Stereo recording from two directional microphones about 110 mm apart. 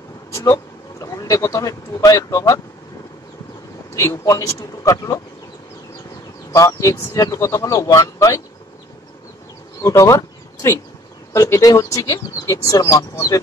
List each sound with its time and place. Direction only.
0.3 s vehicle: 25° left (ahead or behind)
1.0 s speech: 30° left (ahead or behind)
3.9 s speech: 30° left (ahead or behind)
6.5 s speech: 30° left (ahead or behind)
9.8 s speech: 30° left (ahead or behind)